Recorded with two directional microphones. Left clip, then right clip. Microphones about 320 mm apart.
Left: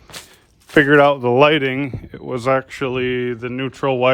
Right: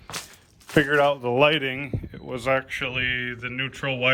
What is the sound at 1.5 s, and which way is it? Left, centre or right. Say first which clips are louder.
Speech: left 7 dB; left.